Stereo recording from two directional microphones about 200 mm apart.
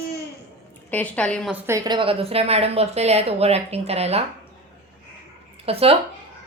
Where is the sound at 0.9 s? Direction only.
5° left (ahead or behind).